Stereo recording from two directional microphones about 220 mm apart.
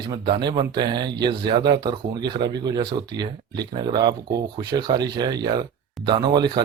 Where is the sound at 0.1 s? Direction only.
20° right (ahead or behind).